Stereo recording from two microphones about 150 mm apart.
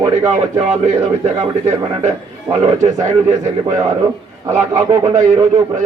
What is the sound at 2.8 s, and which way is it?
Speech, 50° right (ahead or behind).